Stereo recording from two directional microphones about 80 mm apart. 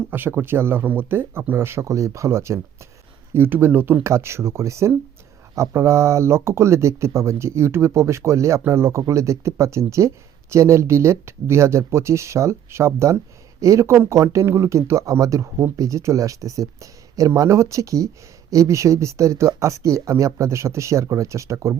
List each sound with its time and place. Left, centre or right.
0.1 s speech: right
3.3 s speech: right